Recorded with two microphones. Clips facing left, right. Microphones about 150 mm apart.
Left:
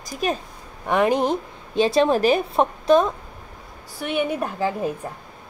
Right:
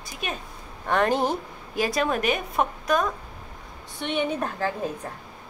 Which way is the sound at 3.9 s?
5° left (ahead or behind).